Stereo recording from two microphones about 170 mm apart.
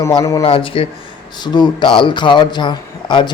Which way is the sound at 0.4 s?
35° left (ahead or behind).